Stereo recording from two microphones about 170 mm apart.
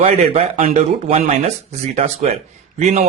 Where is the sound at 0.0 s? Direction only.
40° right (ahead or behind).